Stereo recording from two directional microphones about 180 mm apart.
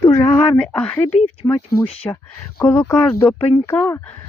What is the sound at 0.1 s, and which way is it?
Speech, 10° left (ahead or behind).